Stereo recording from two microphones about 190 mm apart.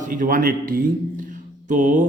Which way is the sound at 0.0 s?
45° right (ahead or behind).